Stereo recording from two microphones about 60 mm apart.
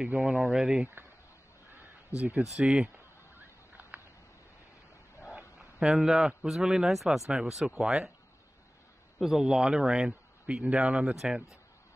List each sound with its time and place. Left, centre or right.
0.0 s speech: centre
1.8 s a sound: right
2.6 s speech: centre
3.3 s a sound: right
5.3 s speech: centre
9.2 s speech: centre